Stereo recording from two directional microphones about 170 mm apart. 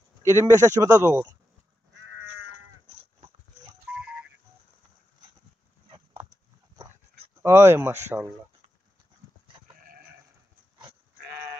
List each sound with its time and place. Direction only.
0.2 s speech: 15° right (ahead or behind)
5.9 s a sound: 35° right (ahead or behind)
7.4 s speech: 15° right (ahead or behind)